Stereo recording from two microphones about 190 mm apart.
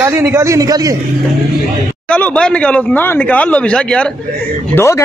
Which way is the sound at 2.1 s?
5° left (ahead or behind).